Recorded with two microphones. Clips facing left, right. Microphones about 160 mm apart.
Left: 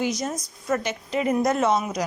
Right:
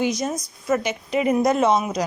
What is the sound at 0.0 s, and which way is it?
A woman's voice, 15° right (ahead or behind).